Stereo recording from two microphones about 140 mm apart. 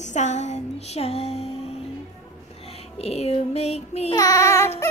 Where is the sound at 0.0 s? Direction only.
55° left (ahead or behind).